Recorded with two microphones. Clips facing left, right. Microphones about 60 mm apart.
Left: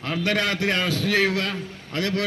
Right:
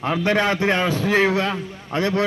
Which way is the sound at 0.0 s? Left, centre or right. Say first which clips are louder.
Right 5 dB; right.